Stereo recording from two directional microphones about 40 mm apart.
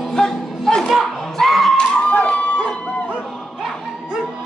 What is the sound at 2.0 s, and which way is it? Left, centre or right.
Crowd, left.